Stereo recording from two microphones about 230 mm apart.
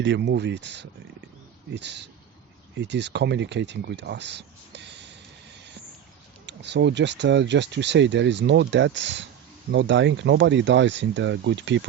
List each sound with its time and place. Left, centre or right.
0.0 s speech: right
6.4 s speech: right